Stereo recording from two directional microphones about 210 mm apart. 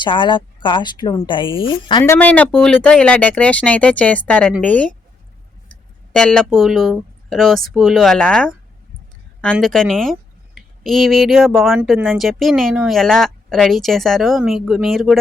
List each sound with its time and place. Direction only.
0.0 s speech: 25° left (ahead or behind)
2.1 s speech: 5° left (ahead or behind)
6.1 s speech: 5° left (ahead or behind)